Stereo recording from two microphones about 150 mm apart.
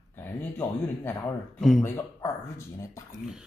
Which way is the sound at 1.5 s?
Centre (ahead or behind).